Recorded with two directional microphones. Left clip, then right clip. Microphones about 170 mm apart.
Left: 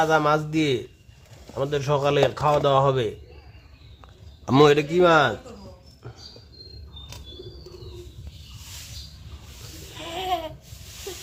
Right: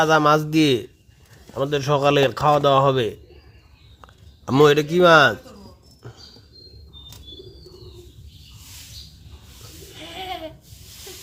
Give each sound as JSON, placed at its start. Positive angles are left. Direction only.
{"t": 0.0, "sound": "a man's voice", "side_deg": -30}
{"t": 4.5, "sound": "speech", "side_deg": -15}
{"t": 9.9, "sound": "a sound", "side_deg": 40}